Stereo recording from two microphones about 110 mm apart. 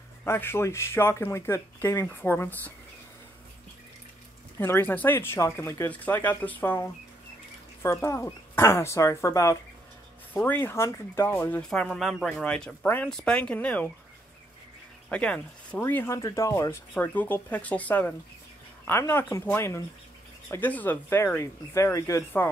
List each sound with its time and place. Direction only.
0.2 s speech: 20° left (ahead or behind)
4.6 s speech: 20° left (ahead or behind)
10.3 s speech: 15° left (ahead or behind)
11.7 s speech: 5° left (ahead or behind)
12.8 s speech: 20° left (ahead or behind)
15.0 s speech: 10° left (ahead or behind)
16.2 s speech: 30° left (ahead or behind)
16.9 s speech: 15° left (ahead or behind)